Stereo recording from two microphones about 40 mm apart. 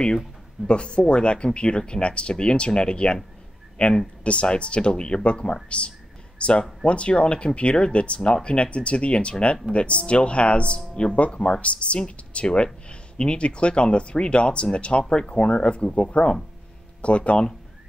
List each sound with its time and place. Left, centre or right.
0.7 s speech: left